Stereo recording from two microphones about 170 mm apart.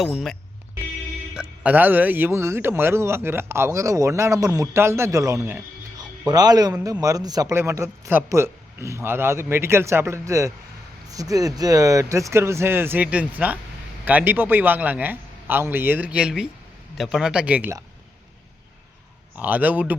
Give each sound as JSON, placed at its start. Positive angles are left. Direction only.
{"t": 0.0, "sound": "a man's voice", "side_deg": 0}
{"t": 19.4, "sound": "a man's voice", "side_deg": -10}